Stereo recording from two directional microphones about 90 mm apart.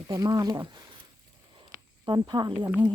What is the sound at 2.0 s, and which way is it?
Speech, 55° right (ahead or behind).